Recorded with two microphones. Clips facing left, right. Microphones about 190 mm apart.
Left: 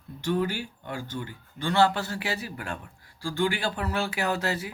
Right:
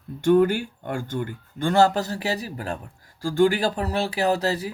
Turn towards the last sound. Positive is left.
turn(degrees=-35)  # may be behind; listen again after turning